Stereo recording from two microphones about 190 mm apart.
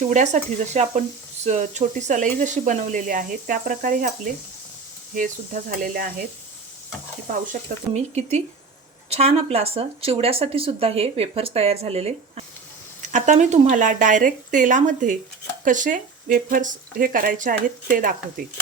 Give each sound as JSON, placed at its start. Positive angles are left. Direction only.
{"t": 0.0, "sound": "speech", "side_deg": -40}
{"t": 5.1, "sound": "speech", "side_deg": -45}
{"t": 7.3, "sound": "speech", "side_deg": -45}